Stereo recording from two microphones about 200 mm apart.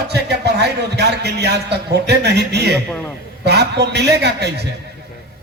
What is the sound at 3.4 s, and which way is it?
A man's voice, 55° right (ahead or behind).